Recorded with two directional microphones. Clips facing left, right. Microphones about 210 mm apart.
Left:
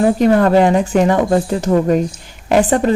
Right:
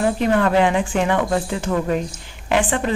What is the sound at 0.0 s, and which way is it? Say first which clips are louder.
Speech: left 6 dB; 40° left (ahead or behind).